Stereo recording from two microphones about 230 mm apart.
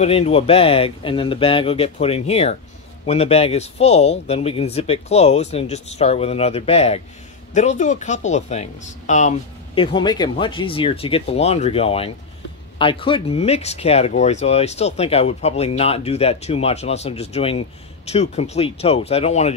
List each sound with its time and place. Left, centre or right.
0.0 s speech: left
9.8 s speech: centre